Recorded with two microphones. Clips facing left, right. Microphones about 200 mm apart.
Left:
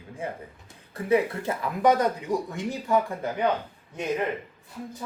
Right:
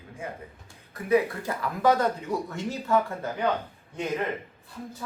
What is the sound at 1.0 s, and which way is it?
Speech, 25° left (ahead or behind).